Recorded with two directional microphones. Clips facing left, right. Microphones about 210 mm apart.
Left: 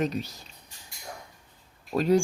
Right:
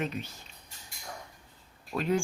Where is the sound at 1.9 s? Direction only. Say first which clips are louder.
Left 6 dB; 40° left (ahead or behind).